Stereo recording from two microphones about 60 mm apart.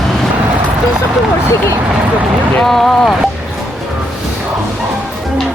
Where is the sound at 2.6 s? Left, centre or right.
Centre.